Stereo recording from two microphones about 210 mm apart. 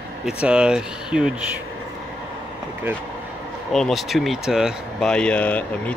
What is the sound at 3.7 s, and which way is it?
Speech, centre (ahead or behind).